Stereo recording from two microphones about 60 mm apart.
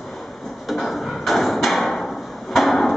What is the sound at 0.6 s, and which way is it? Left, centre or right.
Thump, centre.